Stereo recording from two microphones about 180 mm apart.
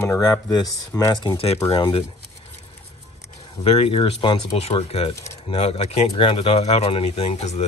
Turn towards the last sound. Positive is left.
turn(degrees=35)  # may be behind; listen again after turning